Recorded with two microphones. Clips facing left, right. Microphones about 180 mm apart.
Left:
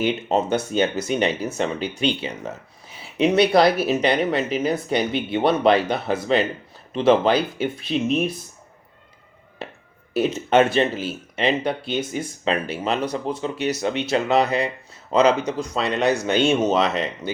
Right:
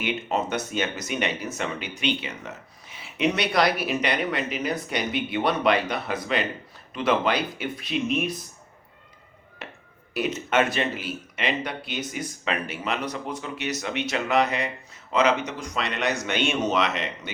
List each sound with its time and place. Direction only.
0.0 s speech: 30° left (ahead or behind)
10.2 s speech: 30° left (ahead or behind)